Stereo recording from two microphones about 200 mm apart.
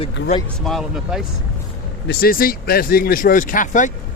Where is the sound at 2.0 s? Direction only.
50° left (ahead or behind).